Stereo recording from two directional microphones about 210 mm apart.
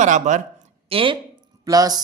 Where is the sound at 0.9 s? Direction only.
25° right (ahead or behind).